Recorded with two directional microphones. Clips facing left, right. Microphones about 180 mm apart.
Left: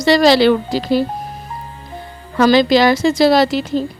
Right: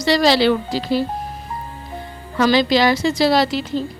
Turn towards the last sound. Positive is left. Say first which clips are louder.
# left 4 dB
turn(degrees=45)  # may be behind; listen again after turning